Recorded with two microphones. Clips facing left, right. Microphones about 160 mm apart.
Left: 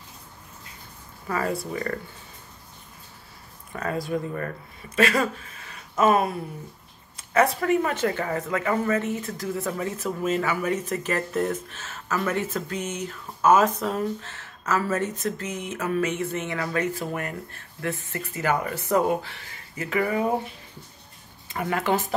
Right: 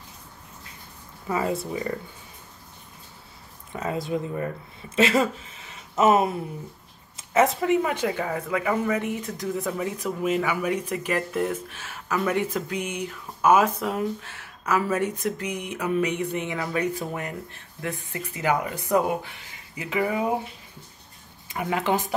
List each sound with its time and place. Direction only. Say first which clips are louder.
1.3 s speech: right 1 dB; 20° right (ahead or behind)
3.7 s speech: even; 20° right (ahead or behind)
21.5 s speech: even; 15° right (ahead or behind)